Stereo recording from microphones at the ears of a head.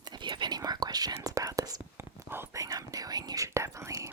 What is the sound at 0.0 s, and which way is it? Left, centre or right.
Whispering, right.